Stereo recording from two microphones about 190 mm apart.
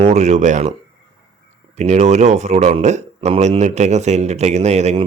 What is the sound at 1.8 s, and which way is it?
Speech, 35° right (ahead or behind).